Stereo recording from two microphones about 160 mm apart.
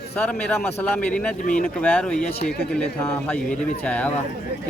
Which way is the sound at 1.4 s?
60° left (ahead or behind).